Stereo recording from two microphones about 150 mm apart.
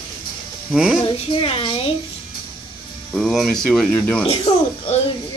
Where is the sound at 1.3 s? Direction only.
35° left (ahead or behind).